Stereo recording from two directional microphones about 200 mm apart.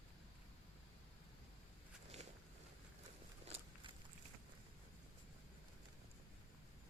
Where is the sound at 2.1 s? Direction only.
30° right (ahead or behind).